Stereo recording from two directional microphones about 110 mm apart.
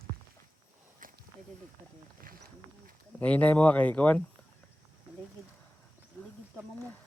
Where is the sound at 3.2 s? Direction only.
15° left (ahead or behind).